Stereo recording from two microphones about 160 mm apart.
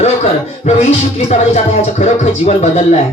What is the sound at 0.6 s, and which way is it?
Music, 45° left (ahead or behind).